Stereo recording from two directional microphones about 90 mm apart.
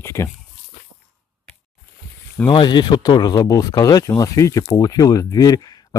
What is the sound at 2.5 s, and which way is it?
Speech, 60° left (ahead or behind).